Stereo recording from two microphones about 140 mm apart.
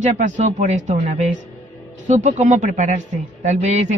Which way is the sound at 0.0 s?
60° right (ahead or behind).